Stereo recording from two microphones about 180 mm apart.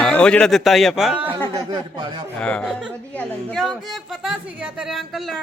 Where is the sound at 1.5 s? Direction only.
20° right (ahead or behind).